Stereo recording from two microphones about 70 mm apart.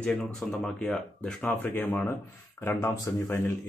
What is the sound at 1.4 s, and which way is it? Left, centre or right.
A man's voice, left.